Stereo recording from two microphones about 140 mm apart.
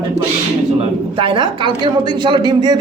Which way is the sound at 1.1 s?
35° right (ahead or behind).